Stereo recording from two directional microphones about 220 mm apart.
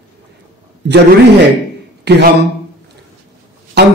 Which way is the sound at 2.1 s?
50° right (ahead or behind).